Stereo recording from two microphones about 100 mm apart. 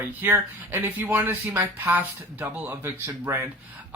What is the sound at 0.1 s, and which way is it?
Speech, 20° right (ahead or behind).